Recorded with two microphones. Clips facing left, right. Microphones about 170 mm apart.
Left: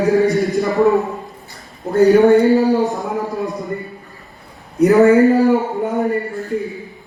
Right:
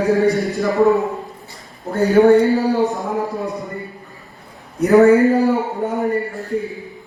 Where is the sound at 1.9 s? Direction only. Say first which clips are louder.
Left 2 dB; 20° left (ahead or behind).